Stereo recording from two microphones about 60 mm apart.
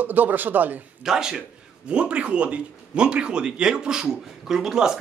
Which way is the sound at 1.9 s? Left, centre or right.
Right.